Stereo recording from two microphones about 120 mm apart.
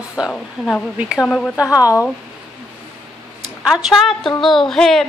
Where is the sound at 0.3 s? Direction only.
10° left (ahead or behind).